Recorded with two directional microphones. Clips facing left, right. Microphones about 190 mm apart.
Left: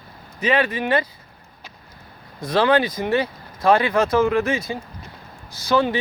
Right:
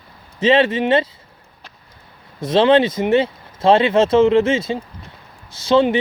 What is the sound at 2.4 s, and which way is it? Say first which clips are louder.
Speech: right 5 dB; 25° right (ahead or behind).